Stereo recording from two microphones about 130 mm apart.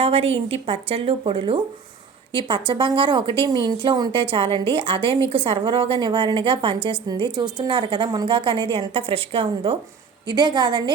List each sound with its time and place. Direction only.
0.0 s a woman's voice: 50° right (ahead or behind)